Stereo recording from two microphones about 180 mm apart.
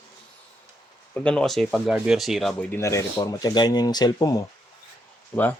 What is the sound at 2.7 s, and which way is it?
Speech, 15° left (ahead or behind).